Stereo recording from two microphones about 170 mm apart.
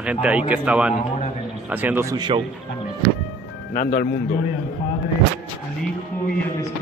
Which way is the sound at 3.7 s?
60° left (ahead or behind).